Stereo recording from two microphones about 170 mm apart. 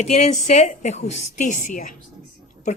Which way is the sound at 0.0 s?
45° left (ahead or behind).